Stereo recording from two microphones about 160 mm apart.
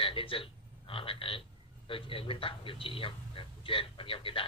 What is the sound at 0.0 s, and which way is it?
Speech, 35° left (ahead or behind).